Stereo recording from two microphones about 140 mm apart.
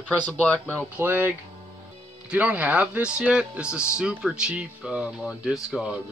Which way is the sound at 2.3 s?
10° right (ahead or behind).